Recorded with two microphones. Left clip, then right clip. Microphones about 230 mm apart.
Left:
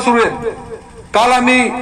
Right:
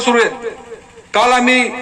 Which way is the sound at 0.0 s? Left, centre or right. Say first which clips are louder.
Left 1 dB; left.